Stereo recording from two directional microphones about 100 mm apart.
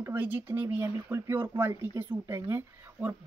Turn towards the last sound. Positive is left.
turn(degrees=-25)  # may be behind; listen again after turning